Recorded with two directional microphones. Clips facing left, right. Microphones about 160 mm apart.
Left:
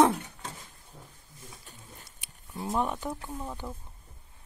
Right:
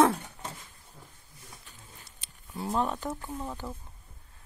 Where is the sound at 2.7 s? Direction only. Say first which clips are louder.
Even; 15° left (ahead or behind).